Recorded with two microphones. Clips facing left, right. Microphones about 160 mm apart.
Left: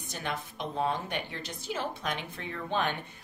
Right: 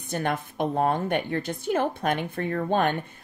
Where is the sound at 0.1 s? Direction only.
55° right (ahead or behind).